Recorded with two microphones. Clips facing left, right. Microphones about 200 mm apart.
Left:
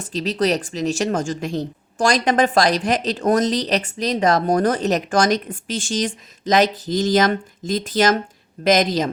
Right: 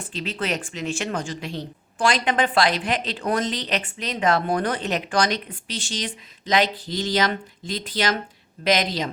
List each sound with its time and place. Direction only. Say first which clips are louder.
0.0 s speech: left 8 dB; 40° left (ahead or behind)